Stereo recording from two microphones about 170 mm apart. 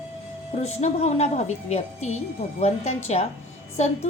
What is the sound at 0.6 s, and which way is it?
A woman's voice, 40° left (ahead or behind).